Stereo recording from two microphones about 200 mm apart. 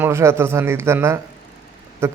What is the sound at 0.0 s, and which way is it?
A man's voice, 15° right (ahead or behind).